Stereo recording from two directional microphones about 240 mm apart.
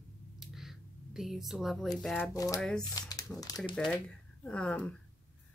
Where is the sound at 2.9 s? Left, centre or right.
Centre.